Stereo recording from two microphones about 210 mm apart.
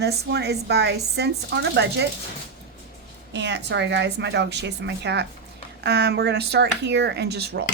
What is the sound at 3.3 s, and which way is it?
A woman's voice, 55° right (ahead or behind).